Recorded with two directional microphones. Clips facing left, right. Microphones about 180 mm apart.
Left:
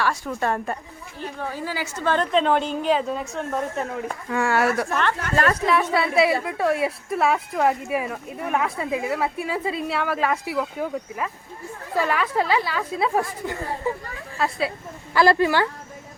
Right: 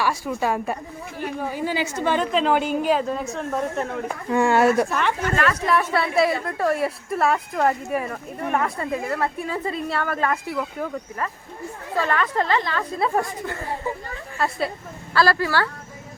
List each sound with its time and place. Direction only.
0.0 s a woman's voice: 10° right (ahead or behind)
2.2 s a woman's voice: centre (ahead or behind)
4.3 s speech: 25° right (ahead or behind)
5.6 s a woman's voice: centre (ahead or behind)
14.3 s a woman's voice: centre (ahead or behind)
15.1 s speech: 20° left (ahead or behind)